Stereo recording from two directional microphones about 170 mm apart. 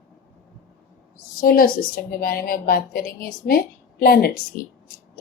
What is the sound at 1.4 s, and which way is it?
A woman's voice, 60° left (ahead or behind).